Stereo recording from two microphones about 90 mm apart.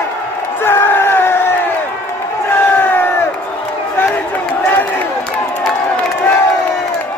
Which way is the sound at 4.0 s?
20° left (ahead or behind).